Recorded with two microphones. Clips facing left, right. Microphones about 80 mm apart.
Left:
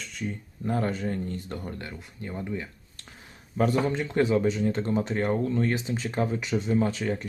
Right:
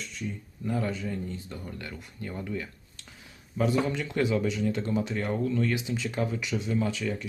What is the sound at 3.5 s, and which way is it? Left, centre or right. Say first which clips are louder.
Speech: left 2 dB; left.